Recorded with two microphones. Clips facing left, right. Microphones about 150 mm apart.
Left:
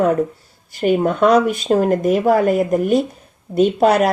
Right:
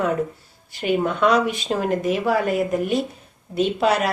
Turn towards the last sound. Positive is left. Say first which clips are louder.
# left 6 dB
turn(degrees=45)  # may be behind; listen again after turning